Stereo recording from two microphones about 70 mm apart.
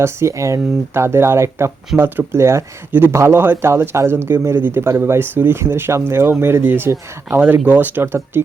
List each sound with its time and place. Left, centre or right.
0.0 s speech: right